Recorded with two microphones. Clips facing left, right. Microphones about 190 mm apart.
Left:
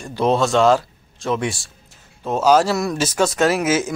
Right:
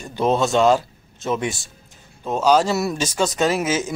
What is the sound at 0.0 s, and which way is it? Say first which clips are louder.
Speech: left 1 dB; centre (ahead or behind).